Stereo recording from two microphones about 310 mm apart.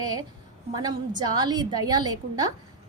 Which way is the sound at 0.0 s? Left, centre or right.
Centre.